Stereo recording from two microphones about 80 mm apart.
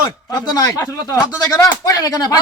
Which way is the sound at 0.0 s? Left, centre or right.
Left.